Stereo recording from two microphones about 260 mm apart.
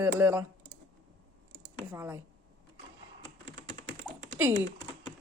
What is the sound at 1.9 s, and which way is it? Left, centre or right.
Speech, centre.